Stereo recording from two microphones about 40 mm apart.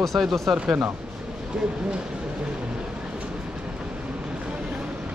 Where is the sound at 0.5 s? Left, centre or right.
Right.